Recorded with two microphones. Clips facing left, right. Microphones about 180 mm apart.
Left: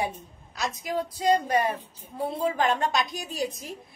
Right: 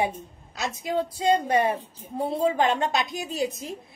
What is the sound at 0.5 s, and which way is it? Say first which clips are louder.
A woman's voice: right 2 dB; 25° right (ahead or behind).